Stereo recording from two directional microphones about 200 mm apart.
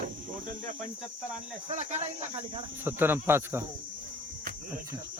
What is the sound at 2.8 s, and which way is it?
Speech, 10° right (ahead or behind).